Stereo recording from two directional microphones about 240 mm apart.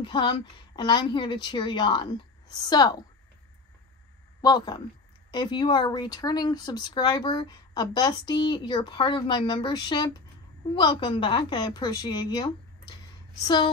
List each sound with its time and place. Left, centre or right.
0.0 s a woman's voice: centre
4.4 s a man's voice: centre